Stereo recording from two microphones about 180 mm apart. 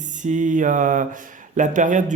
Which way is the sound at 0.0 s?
45° right (ahead or behind).